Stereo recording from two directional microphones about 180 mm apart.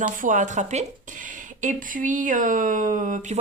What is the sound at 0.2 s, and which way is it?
Speech, 45° right (ahead or behind).